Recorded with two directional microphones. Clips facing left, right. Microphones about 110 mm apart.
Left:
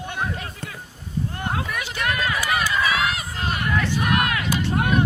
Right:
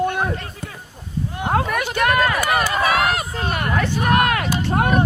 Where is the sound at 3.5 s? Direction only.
50° right (ahead or behind).